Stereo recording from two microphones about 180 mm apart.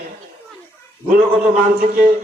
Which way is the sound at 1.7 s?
50° right (ahead or behind).